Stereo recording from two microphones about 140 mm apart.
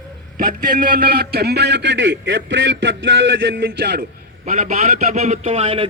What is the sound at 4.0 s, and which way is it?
A man's voice, 65° right (ahead or behind).